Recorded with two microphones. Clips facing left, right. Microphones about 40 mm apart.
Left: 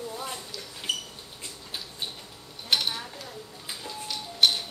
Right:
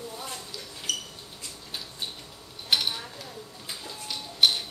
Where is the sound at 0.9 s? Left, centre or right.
Left.